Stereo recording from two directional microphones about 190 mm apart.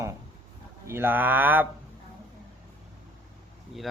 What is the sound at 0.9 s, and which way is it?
Speech, 10° right (ahead or behind).